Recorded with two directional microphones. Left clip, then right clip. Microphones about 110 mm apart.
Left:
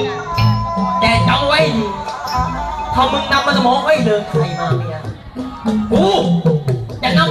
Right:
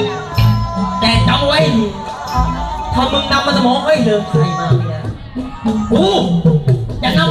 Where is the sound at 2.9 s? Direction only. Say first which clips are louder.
Even; 30° right (ahead or behind).